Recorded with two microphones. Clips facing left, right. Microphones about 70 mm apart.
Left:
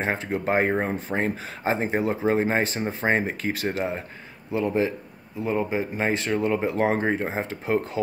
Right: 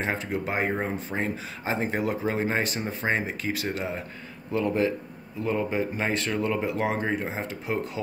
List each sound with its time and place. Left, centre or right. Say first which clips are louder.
0.0 s speech: left 3 dB; left
4.5 s speech: left 1 dB; left